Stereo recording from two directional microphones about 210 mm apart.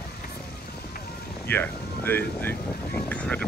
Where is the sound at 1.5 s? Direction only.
10° left (ahead or behind).